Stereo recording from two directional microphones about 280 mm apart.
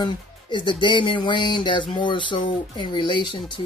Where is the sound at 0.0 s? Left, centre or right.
Centre.